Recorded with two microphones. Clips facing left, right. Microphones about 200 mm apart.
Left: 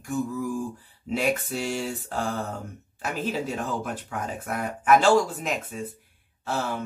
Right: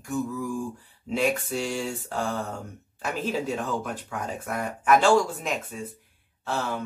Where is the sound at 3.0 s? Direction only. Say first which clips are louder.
Even; 5° left (ahead or behind).